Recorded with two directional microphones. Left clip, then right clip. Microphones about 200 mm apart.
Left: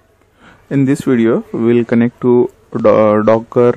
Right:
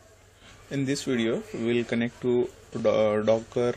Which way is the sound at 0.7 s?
35° left (ahead or behind).